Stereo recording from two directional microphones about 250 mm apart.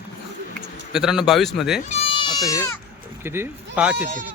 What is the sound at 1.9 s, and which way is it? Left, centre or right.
Goat, left.